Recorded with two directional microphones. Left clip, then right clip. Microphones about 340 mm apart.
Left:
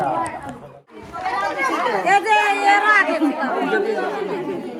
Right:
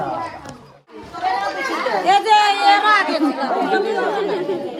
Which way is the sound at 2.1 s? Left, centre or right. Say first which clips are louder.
Right 3 dB; centre.